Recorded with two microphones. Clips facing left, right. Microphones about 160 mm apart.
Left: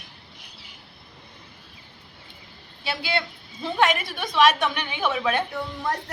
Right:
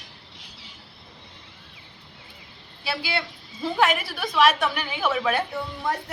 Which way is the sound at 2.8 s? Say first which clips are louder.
Left 1 dB; 5° right (ahead or behind).